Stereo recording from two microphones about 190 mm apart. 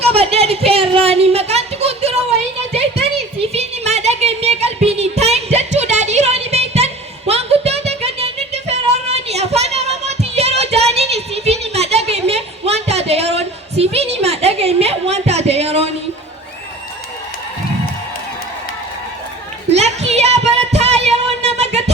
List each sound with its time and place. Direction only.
0.0 s a sound: 30° right (ahead or behind)
3.5 s music: 35° right (ahead or behind)
19.7 s music: 35° right (ahead or behind)